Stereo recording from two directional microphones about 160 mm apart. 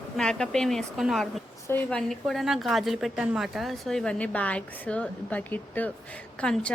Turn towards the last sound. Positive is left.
turn(degrees=5)  # may be behind; listen again after turning